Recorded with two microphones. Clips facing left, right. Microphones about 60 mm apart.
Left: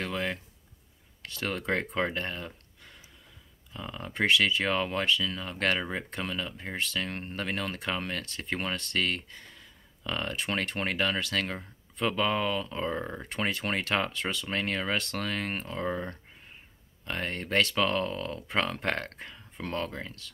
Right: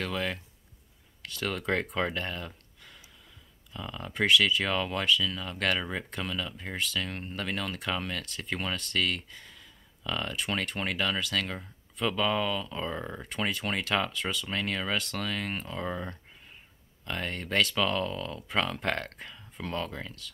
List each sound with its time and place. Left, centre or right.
0.0 s speech: left
19.6 s speech: left